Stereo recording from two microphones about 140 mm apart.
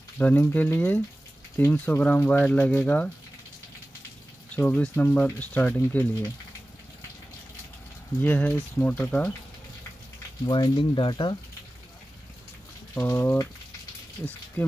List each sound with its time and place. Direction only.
0.2 s speech: 15° left (ahead or behind)
4.6 s speech: 10° left (ahead or behind)
8.2 s speech: 15° left (ahead or behind)
10.4 s speech: 30° left (ahead or behind)
12.9 s speech: 15° left (ahead or behind)
14.6 s speech: 15° left (ahead or behind)